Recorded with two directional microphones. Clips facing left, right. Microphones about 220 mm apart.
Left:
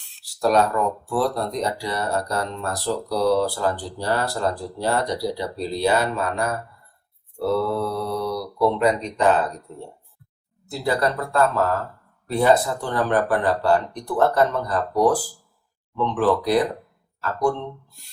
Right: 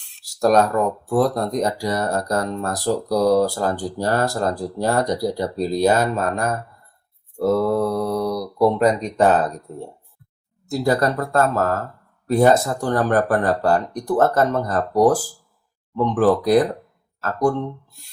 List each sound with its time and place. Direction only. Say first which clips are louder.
0.3 s a sound: right 3 dB; 45° right (ahead or behind)
1.1 s speech: right 5 dB; 45° right (ahead or behind)
10.7 s speech: right 4 dB; 45° right (ahead or behind)